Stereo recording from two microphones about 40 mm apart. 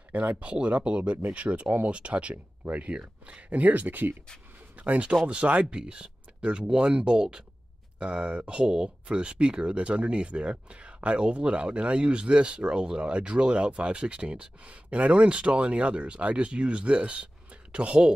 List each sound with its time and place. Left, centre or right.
0.1 s speech: right
0.4 s speech: right
3.4 s speech: right
4.7 s speech: right